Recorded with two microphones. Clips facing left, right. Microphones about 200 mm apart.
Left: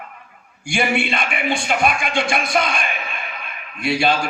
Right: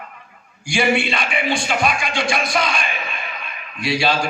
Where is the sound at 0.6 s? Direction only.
55° left (ahead or behind).